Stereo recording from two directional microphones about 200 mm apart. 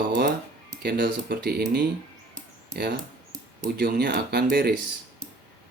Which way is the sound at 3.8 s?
55° right (ahead or behind).